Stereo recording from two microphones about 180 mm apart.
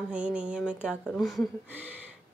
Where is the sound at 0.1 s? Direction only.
5° right (ahead or behind).